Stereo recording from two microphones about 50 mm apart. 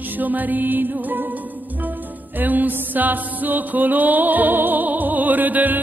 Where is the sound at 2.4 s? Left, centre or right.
Right.